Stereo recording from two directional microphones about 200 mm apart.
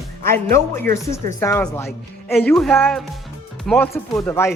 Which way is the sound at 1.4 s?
10° left (ahead or behind).